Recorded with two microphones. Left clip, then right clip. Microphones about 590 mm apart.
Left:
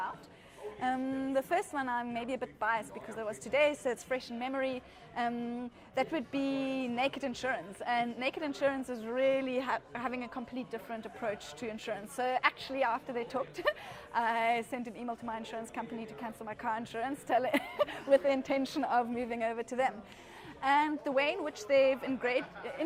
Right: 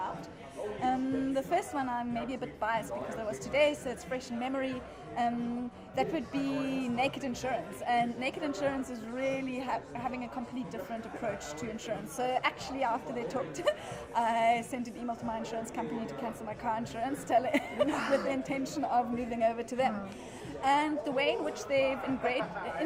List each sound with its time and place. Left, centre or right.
0.8 s a woman's voice: left
11.9 s a woman's voice: left
19.3 s speech: left
20.6 s a woman's voice: left